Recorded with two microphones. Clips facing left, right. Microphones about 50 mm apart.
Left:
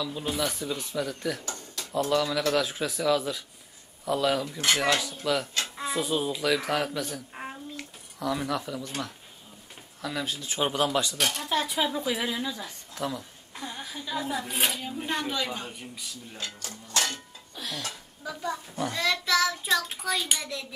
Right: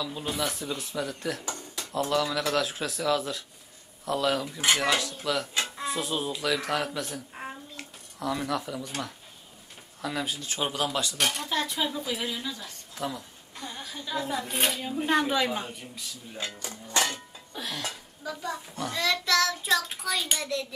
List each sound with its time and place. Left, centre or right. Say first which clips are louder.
0.0 s a woman's voice: left 1 dB; centre
12.9 s a woman's voice: left 1 dB; centre
15.7 s a woman's voice: even; centre
16.3 s speech: right 4 dB; centre
17.6 s speech: even; centre
18.9 s child singing: even; centre